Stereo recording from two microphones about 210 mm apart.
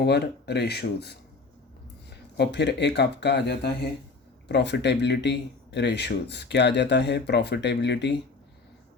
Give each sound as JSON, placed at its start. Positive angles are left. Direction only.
{"t": 0.0, "sound": "speech", "side_deg": 50}